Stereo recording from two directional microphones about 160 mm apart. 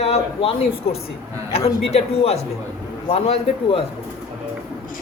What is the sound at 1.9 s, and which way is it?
Speech, 40° left (ahead or behind).